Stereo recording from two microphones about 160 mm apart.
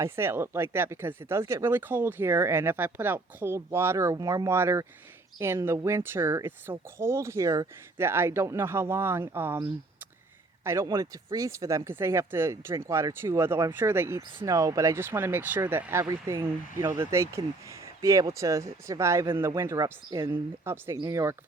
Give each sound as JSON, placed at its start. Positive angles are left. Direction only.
{"t": 0.0, "sound": "speech", "side_deg": -15}
{"t": 10.6, "sound": "speech", "side_deg": -15}